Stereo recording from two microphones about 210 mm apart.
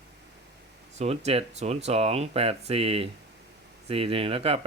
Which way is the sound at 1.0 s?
30° right (ahead or behind).